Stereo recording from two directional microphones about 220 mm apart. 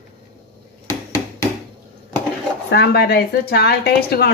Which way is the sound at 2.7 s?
45° left (ahead or behind).